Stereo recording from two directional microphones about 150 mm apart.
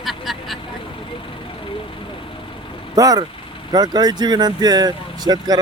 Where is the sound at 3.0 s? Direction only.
25° right (ahead or behind).